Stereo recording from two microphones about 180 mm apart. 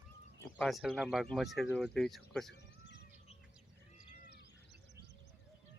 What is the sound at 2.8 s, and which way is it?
Bird, 70° left (ahead or behind).